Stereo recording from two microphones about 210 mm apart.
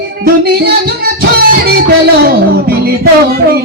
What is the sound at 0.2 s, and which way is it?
Music, 45° right (ahead or behind).